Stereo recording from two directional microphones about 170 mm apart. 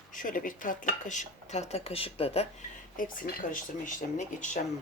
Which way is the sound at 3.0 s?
55° left (ahead or behind).